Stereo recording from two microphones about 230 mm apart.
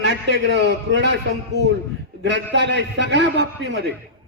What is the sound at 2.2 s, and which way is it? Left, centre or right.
A man's voice, right.